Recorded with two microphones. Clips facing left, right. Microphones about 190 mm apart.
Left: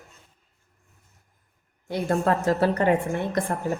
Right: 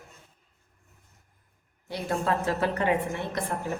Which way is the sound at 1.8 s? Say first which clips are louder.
Left 5 dB; 50° left (ahead or behind).